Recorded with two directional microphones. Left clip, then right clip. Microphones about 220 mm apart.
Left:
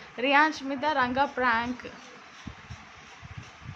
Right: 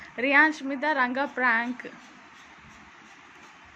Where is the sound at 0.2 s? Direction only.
10° right (ahead or behind).